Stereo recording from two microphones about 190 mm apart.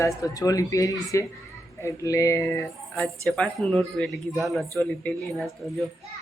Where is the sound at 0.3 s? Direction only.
20° left (ahead or behind).